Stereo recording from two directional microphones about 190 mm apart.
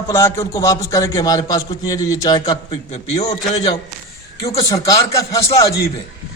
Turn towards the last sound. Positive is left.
turn(degrees=15)  # may be behind; listen again after turning